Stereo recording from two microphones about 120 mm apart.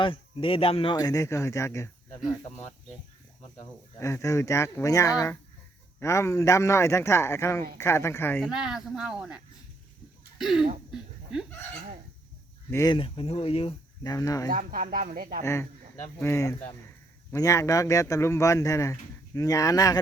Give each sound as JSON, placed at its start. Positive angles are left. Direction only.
{"t": 0.0, "sound": "speech", "side_deg": 45}
{"t": 0.9, "sound": "a man's voice", "side_deg": 30}
{"t": 3.6, "sound": "a man's voice", "side_deg": 25}
{"t": 8.4, "sound": "speech", "side_deg": -5}
{"t": 10.3, "sound": "cough", "side_deg": -5}
{"t": 10.9, "sound": "a sound", "side_deg": -5}
{"t": 12.9, "sound": "speech", "side_deg": 45}
{"t": 14.0, "sound": "speech", "side_deg": 30}
{"t": 14.9, "sound": "speech", "side_deg": -85}
{"t": 15.4, "sound": "a man's voice", "side_deg": 20}